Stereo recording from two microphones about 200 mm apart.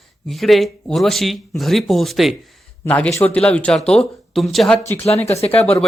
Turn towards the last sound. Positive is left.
turn(degrees=30)  # may be behind; listen again after turning